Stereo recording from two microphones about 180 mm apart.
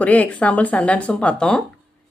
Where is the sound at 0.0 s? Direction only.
10° left (ahead or behind).